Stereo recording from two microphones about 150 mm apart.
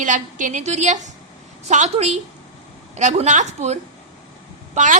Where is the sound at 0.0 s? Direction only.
60° right (ahead or behind).